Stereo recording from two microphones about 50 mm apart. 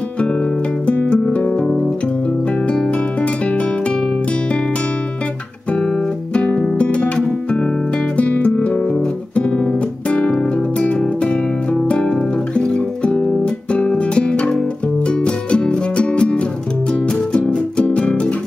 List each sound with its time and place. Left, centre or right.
0.8 s music: left
2.7 s music: left
6.3 s music: left
11.9 s music: centre